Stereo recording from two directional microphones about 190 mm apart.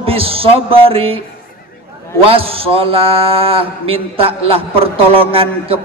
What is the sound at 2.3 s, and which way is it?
A man's voice, 30° right (ahead or behind).